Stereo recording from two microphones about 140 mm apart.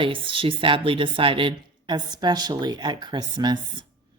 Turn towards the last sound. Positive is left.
turn(degrees=-30)  # may be behind; listen again after turning